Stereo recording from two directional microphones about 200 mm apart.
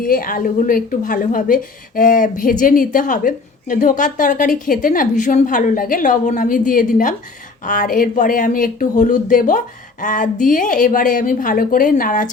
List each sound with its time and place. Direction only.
0.0 s a woman's voice: 45° left (ahead or behind)